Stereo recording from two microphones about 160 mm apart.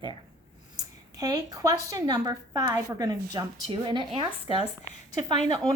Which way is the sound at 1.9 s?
25° right (ahead or behind).